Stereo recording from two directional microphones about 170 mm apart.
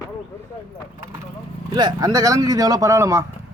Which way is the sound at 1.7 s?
25° right (ahead or behind).